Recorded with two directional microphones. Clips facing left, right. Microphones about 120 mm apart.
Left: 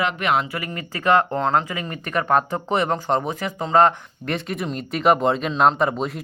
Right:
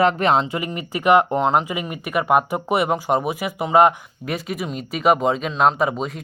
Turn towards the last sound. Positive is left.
turn(degrees=0)  # may be behind; listen again after turning